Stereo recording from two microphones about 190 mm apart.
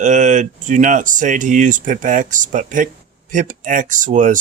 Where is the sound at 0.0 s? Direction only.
40° right (ahead or behind).